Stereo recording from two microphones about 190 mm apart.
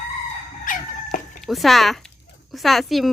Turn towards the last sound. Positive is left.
turn(degrees=0)  # may be behind; listen again after turning